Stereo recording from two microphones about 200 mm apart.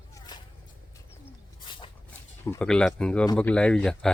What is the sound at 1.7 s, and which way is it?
Dog, 25° left (ahead or behind).